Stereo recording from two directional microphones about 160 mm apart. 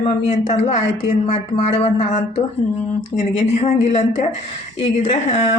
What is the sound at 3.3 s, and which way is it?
Speech, 45° left (ahead or behind).